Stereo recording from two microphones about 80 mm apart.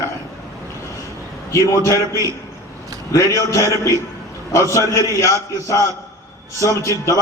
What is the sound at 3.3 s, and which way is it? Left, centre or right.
A man's voice, left.